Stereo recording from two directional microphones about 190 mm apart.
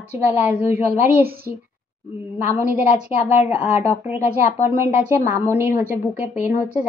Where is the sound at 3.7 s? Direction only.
35° left (ahead or behind).